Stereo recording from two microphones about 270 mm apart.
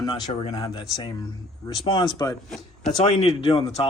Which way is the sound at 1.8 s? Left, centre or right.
Centre.